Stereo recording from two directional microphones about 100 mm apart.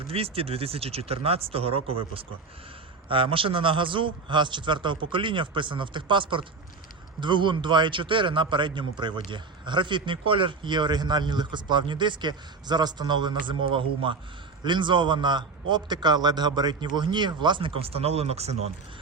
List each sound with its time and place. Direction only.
0.1 s a man's voice: 75° right (ahead or behind); by 17.7 s 50° right (ahead or behind)
17.7 s speech: 75° right (ahead or behind)